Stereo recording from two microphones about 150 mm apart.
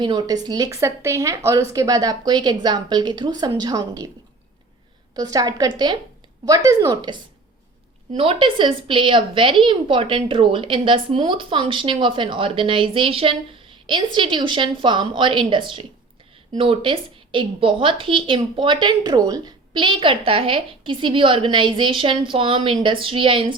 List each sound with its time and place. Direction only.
0.0 s a woman's voice: 30° right (ahead or behind)
5.1 s a woman's voice: 25° right (ahead or behind)
8.1 s a woman's voice: 40° right (ahead or behind)